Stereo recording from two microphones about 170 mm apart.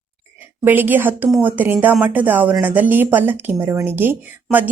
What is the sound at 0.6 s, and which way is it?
Speech, 10° right (ahead or behind).